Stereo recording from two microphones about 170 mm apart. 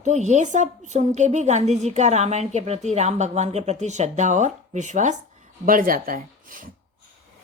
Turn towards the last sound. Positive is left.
turn(degrees=-55)  # may be behind; listen again after turning